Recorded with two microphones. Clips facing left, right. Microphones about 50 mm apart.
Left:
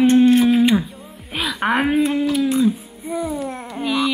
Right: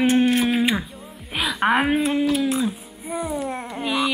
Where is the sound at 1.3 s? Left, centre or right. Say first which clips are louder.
Even; centre.